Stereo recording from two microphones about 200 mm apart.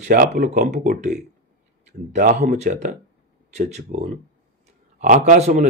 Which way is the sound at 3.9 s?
35° right (ahead or behind).